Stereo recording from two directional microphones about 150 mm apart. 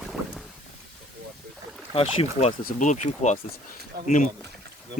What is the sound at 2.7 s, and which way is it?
Speech, 55° left (ahead or behind).